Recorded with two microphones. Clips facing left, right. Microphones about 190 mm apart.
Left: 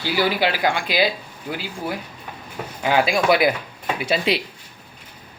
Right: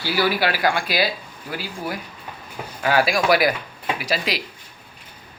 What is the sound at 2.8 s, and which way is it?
Speech, 20° left (ahead or behind).